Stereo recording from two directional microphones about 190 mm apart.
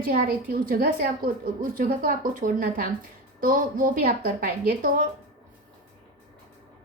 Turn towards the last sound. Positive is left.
turn(degrees=-50)  # may be behind; listen again after turning